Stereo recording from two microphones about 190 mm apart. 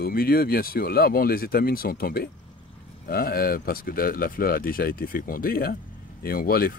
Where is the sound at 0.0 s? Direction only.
50° left (ahead or behind).